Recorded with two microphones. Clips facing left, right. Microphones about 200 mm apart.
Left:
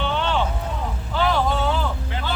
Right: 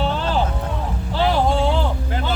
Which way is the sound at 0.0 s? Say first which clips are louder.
Right 2 dB; 35° right (ahead or behind).